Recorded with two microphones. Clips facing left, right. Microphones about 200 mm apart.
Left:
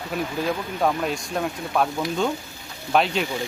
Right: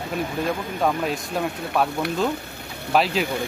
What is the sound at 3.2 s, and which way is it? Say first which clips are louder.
Speech: right 2 dB; 55° right (ahead or behind).